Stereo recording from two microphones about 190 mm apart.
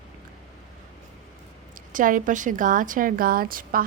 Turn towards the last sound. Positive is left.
turn(degrees=-45)  # may be behind; listen again after turning